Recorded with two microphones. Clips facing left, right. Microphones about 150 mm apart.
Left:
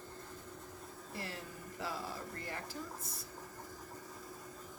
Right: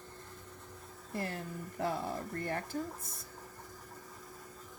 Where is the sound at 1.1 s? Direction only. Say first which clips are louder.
Right 7 dB; 50° right (ahead or behind).